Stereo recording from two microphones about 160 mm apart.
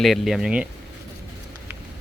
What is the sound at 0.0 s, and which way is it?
Speech, centre (ahead or behind).